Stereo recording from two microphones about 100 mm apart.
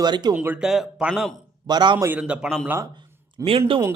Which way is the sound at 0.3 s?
15° right (ahead or behind).